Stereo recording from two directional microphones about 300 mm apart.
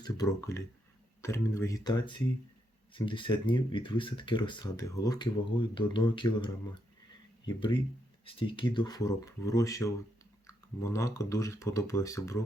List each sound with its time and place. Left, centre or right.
0.0 s speech: centre